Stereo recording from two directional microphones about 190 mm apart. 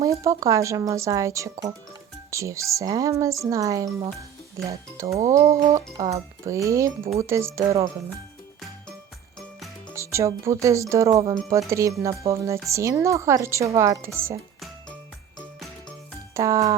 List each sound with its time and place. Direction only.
0.0 s speech: 15° right (ahead or behind)
9.9 s speech: 15° right (ahead or behind)
16.3 s a child's voice: 15° right (ahead or behind)